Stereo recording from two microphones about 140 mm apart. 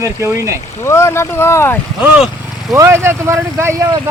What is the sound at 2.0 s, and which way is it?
Speech, 5° right (ahead or behind).